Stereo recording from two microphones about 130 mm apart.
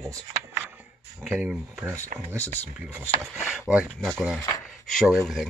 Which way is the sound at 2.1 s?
90° right.